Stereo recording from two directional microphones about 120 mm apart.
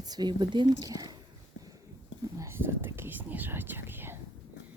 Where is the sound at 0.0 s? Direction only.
35° right (ahead or behind).